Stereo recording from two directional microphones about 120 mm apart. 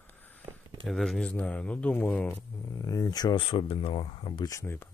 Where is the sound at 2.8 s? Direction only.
30° left (ahead or behind); by 4.4 s 50° left (ahead or behind).